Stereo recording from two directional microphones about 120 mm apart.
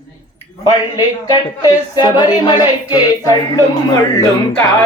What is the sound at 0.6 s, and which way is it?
Speech, 35° left (ahead or behind).